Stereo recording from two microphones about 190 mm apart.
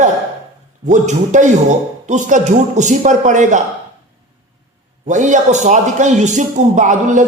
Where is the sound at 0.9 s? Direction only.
40° right (ahead or behind).